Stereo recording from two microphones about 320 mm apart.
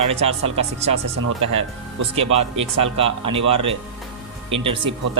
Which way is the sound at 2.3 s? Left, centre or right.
Centre.